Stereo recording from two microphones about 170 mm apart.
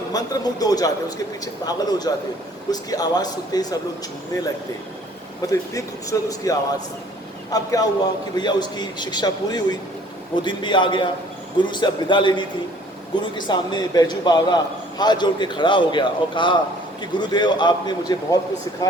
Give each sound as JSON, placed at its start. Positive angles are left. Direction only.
{"t": 0.1, "sound": "a man's voice", "side_deg": 20}
{"t": 5.5, "sound": "a man's voice", "side_deg": 20}